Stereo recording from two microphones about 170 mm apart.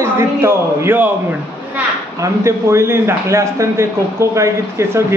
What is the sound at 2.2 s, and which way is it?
A man's voice, 15° right (ahead or behind).